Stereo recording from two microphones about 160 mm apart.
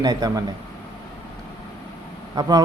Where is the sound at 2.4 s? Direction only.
25° right (ahead or behind).